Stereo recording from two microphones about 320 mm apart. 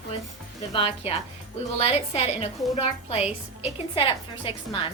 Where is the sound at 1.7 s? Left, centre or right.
Centre.